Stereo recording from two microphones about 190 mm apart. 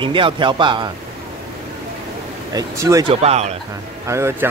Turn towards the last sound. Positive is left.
turn(degrees=-15)  # may be behind; listen again after turning